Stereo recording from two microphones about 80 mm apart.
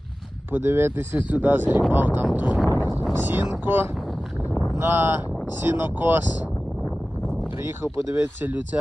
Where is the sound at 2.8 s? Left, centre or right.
Left.